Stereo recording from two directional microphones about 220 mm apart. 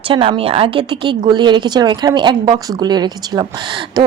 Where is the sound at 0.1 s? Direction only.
25° right (ahead or behind).